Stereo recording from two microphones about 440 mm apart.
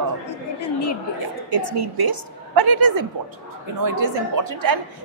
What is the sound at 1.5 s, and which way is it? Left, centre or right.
A woman's voice, right.